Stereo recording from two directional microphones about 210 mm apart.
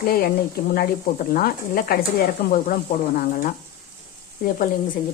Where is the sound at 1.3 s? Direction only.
45° left (ahead or behind).